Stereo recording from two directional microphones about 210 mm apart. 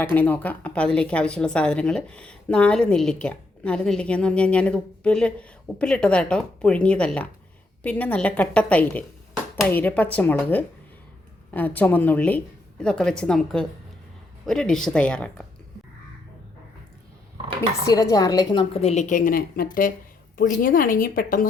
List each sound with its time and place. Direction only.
0.0 s a woman's voice: 10° left (ahead or behind)
17.8 s a woman's voice: 15° left (ahead or behind); by 21.4 s 40° left (ahead or behind)